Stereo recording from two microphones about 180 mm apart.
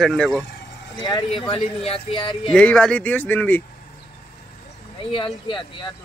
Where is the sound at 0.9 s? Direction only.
20° left (ahead or behind).